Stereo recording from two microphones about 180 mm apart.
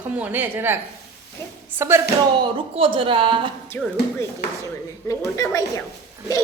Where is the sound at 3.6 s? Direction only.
15° left (ahead or behind).